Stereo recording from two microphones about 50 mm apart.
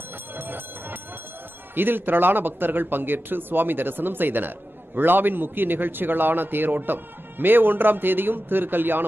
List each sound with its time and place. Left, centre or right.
0.4 s bell: right
1.8 s speech: right